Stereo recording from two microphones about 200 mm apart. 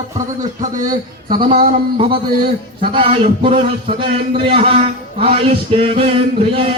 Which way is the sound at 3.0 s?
25° right (ahead or behind).